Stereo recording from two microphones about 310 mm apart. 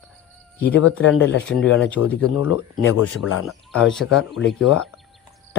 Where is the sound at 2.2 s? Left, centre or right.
Left.